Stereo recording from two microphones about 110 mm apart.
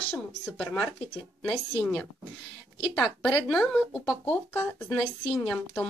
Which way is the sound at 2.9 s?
5° left (ahead or behind).